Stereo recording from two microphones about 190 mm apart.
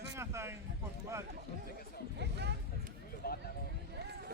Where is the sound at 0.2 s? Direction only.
15° right (ahead or behind).